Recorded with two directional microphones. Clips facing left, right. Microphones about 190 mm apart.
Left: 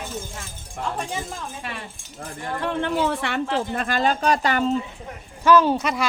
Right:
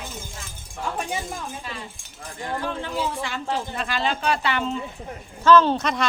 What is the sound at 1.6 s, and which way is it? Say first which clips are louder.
Speech: left 2 dB; 70° left (ahead or behind).